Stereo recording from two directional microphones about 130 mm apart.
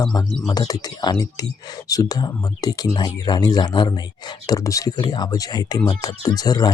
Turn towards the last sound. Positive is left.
turn(degrees=30)  # may be behind; listen again after turning